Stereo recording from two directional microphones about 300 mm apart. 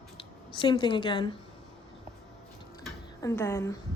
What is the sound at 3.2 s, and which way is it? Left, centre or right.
Speech, centre.